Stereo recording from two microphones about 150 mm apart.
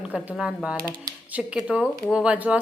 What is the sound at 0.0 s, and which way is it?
A woman's voice, 5° right (ahead or behind).